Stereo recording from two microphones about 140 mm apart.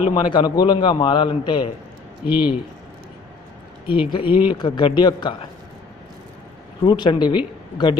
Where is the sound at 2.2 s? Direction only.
10° right (ahead or behind).